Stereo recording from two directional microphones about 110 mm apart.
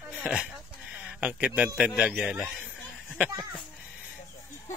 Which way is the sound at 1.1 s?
10° right (ahead or behind).